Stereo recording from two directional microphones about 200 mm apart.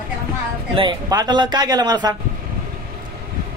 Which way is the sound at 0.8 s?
20° right (ahead or behind).